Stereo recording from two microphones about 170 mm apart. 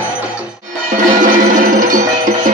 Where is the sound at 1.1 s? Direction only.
50° right (ahead or behind).